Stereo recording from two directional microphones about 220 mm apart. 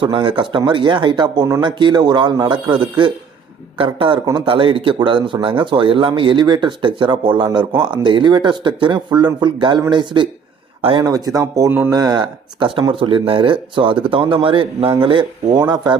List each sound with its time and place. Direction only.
0.0 s a man's voice: 20° right (ahead or behind)